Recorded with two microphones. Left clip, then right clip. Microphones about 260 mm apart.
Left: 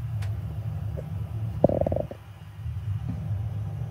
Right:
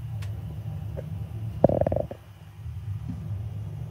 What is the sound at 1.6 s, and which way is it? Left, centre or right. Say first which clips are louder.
Stomach rumble: right 1 dB; left.